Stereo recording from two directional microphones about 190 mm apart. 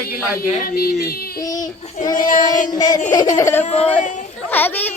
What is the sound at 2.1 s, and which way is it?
Speech, 45° left (ahead or behind).